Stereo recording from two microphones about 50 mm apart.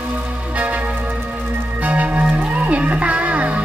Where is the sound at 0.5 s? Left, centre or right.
Right.